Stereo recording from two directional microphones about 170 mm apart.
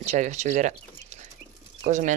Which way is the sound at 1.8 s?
45° right (ahead or behind).